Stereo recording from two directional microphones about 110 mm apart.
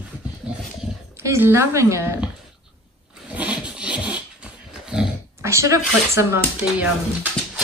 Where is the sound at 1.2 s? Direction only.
25° right (ahead or behind).